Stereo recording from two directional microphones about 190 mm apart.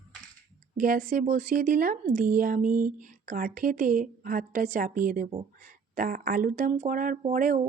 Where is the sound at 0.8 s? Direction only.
45° right (ahead or behind).